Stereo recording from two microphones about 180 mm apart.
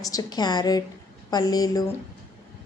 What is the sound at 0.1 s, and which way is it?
A woman's voice, 20° left (ahead or behind).